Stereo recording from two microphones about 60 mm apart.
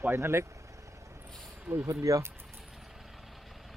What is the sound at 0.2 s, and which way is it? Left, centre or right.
Speech, right.